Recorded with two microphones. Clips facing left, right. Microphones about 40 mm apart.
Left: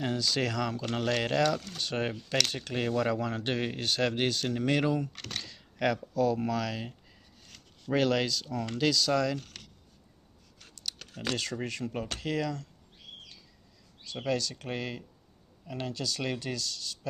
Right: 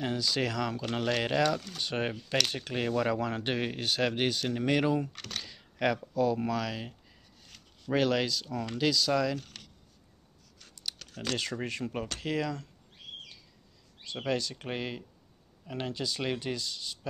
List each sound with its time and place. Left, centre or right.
0.0 s speech: centre
11.0 s computer keyboard: centre
11.6 s speech: centre
14.0 s speech: centre